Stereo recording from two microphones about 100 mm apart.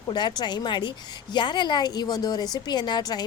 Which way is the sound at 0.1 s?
45° left (ahead or behind).